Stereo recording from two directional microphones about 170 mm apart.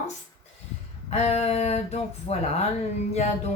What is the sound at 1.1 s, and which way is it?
Speech, 40° left (ahead or behind).